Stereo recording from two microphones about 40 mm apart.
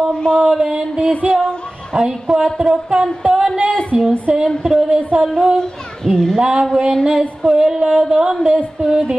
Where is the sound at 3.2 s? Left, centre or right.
Right.